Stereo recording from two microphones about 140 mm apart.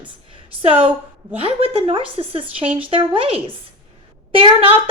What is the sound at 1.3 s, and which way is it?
A woman's voice, 40° right (ahead or behind).